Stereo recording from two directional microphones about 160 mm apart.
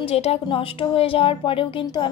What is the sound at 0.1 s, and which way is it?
Speech, 40° left (ahead or behind).